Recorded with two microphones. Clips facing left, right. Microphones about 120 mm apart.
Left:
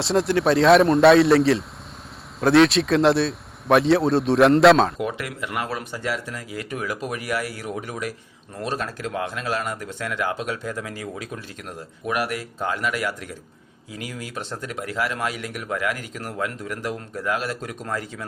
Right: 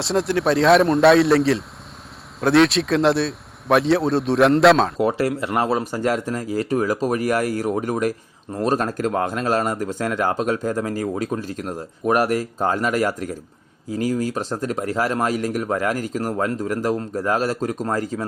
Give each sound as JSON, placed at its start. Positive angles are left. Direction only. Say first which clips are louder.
{"t": 0.0, "sound": "speech", "louder": "even", "side_deg": 0}
{"t": 4.9, "sound": "speech", "louder": "right 8 dB", "side_deg": -35}